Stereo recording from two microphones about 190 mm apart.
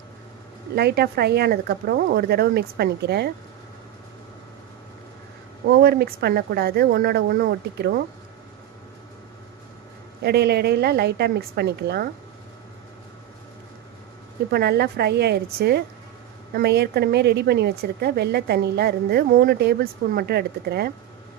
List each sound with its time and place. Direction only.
0.8 s a woman's voice: 55° right (ahead or behind)
5.6 s a woman's voice: 55° right (ahead or behind)
10.2 s a woman's voice: 60° right (ahead or behind)
14.5 s a woman's voice: 55° right (ahead or behind)